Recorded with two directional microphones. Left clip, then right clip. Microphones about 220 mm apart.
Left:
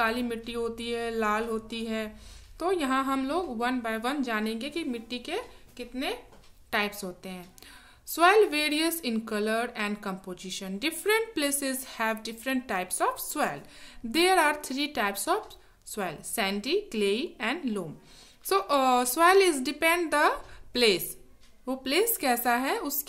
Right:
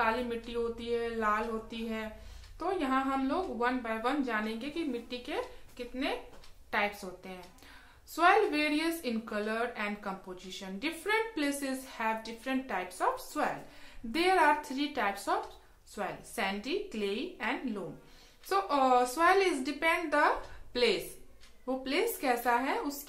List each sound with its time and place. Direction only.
0.0 s a woman's voice: 50° left (ahead or behind)